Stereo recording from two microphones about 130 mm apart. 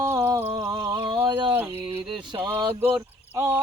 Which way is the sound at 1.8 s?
40° right (ahead or behind).